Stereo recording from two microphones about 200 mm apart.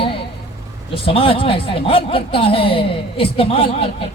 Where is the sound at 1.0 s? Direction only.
25° left (ahead or behind).